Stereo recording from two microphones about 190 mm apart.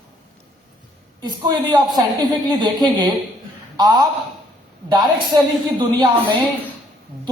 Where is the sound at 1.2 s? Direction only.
20° right (ahead or behind).